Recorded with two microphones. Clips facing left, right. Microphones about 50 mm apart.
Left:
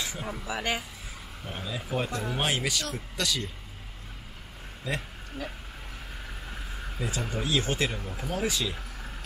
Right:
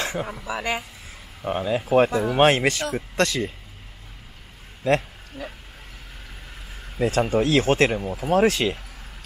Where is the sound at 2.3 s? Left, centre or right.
Right.